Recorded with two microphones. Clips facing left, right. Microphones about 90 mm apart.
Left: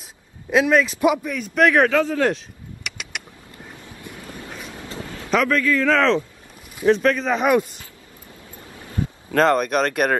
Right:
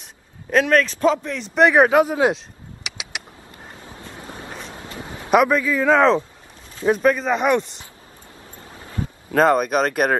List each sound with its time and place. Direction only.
0.5 s a man's voice: centre (ahead or behind)
1.9 s a man's voice: 15° right (ahead or behind)
2.3 s a sound: centre (ahead or behind)
4.1 s vehicle: 30° right (ahead or behind)
5.3 s a man's voice: 10° right (ahead or behind)
9.3 s a man's voice: 5° right (ahead or behind)